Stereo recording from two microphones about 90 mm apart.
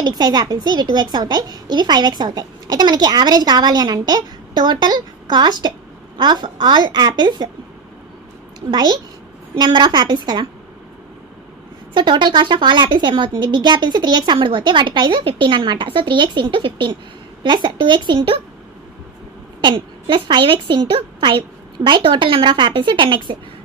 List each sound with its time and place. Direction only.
0.0 s a woman's voice: 50° right (ahead or behind)
8.6 s a woman's voice: 55° right (ahead or behind)
11.9 s a woman's voice: 60° right (ahead or behind)
19.6 s a woman's voice: 60° right (ahead or behind)